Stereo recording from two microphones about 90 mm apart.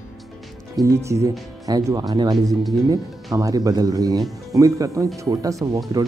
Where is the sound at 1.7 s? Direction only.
45° right (ahead or behind).